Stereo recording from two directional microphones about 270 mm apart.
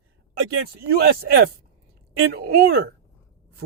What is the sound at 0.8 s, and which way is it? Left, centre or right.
A woman's voice, right.